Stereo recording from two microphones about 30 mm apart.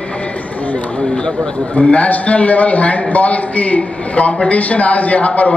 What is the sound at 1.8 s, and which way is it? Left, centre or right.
A man's voice, left.